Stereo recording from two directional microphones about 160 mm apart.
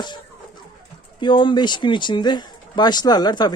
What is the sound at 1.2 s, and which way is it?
Speech, 30° left (ahead or behind).